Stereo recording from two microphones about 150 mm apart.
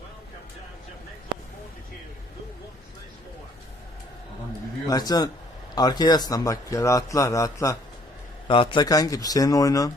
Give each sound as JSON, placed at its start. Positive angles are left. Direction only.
{"t": 4.9, "sound": "a man's voice", "side_deg": 25}
{"t": 8.4, "sound": "a man's voice", "side_deg": 35}